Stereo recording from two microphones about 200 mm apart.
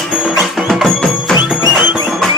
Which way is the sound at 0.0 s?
5° right (ahead or behind).